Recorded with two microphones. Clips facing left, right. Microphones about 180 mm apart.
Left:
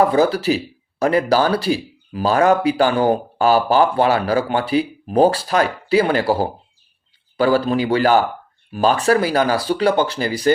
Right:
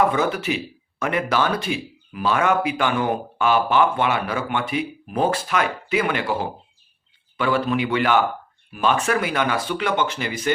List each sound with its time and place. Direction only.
0.0 s speech: 35° left (ahead or behind)